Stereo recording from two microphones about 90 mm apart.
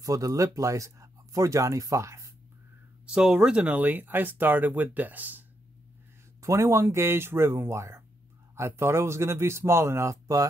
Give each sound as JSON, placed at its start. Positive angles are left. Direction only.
{"t": 0.0, "sound": "speech", "side_deg": -40}
{"t": 3.1, "sound": "speech", "side_deg": -10}
{"t": 6.4, "sound": "speech", "side_deg": -35}